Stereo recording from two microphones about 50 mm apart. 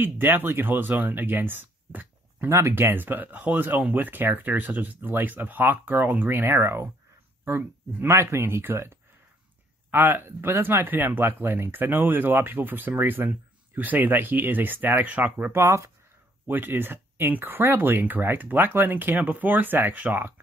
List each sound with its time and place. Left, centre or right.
0.0 s speech: right
2.5 s speech: right
2.9 s speech: right
8.4 s speech: right
9.8 s speech: right
15.0 s speech: right
15.5 s speech: right
16.4 s speech: right